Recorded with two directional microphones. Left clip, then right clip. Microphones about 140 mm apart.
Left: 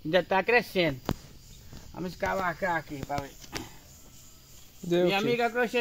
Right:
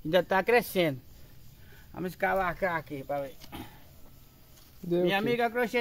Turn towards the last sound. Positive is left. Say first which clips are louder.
# left 1 dB
turn(degrees=-10)  # may be behind; listen again after turning